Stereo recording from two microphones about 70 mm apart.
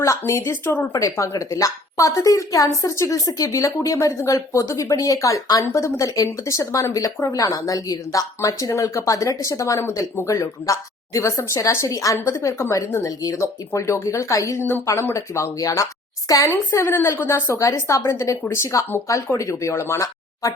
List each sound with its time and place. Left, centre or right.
0.0 s a woman's voice: left
1.1 s a woman's voice: left
12.9 s a woman's voice: left
13.3 s a woman's voice: left
14.6 s a woman's voice: left
15.1 s a woman's voice: left
16.5 s a woman's voice: left